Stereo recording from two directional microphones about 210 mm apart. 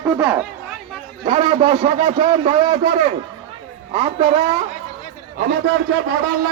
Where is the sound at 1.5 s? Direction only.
35° right (ahead or behind).